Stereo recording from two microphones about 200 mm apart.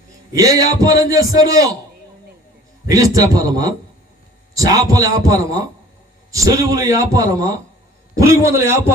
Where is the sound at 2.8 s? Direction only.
15° right (ahead or behind).